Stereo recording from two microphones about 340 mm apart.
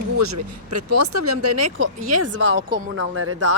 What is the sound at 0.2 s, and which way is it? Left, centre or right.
A woman's voice, right.